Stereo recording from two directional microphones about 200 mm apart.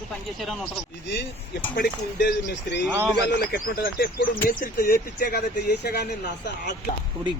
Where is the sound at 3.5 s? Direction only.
50° left (ahead or behind).